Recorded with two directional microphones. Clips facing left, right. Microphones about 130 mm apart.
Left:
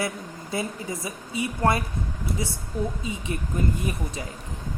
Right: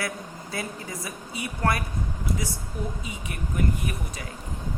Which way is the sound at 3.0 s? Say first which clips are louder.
Left 4 dB; 25° left (ahead or behind).